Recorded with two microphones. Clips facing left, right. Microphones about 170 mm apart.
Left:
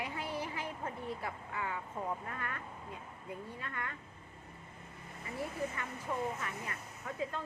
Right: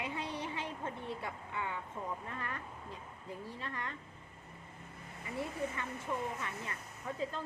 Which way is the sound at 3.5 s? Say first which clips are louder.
Even; 30° right (ahead or behind).